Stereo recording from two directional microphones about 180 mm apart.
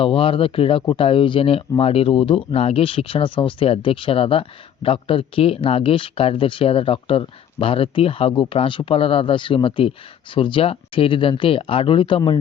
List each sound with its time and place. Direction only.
0.0 s speech: 30° left (ahead or behind)